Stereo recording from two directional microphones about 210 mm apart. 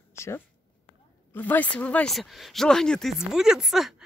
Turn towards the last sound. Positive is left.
turn(degrees=0)  # may be behind; listen again after turning